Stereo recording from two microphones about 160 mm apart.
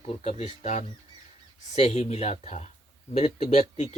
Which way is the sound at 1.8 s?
45° left (ahead or behind).